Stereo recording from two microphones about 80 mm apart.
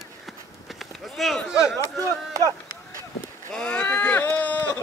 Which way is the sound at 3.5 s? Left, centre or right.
Centre.